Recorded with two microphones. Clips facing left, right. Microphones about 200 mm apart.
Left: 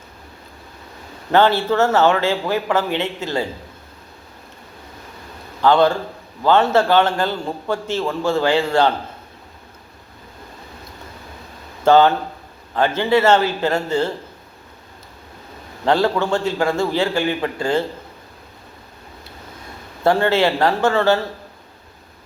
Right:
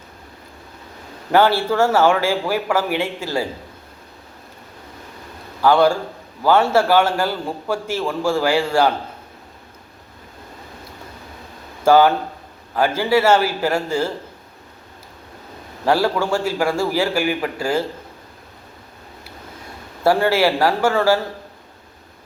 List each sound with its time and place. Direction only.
1.3 s a man's voice: 10° right (ahead or behind)
5.6 s a man's voice: 10° right (ahead or behind)
11.9 s a man's voice: 10° right (ahead or behind)
15.9 s a man's voice: 10° right (ahead or behind)
20.1 s a man's voice: 10° right (ahead or behind)